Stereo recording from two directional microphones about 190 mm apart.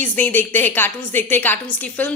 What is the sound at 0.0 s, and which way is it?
A woman's voice, 10° left (ahead or behind).